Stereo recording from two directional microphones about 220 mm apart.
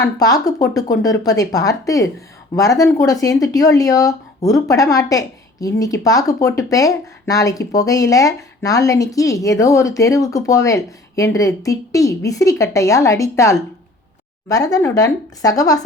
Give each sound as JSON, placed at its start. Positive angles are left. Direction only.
{"t": 0.0, "sound": "speech", "side_deg": 15}